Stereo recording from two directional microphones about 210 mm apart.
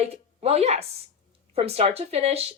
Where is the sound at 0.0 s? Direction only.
30° right (ahead or behind).